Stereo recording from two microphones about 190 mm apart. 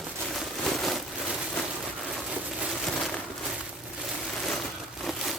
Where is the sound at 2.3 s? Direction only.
5° right (ahead or behind).